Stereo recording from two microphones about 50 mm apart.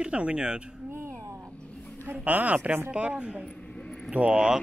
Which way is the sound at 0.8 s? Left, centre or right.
Right.